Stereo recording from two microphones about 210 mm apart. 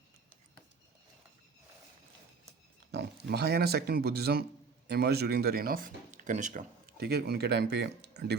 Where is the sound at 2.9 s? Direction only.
50° right (ahead or behind).